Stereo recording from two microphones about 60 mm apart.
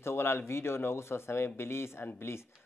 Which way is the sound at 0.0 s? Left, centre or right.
Left.